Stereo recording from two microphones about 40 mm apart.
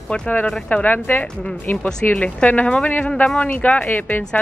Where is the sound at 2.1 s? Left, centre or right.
Left.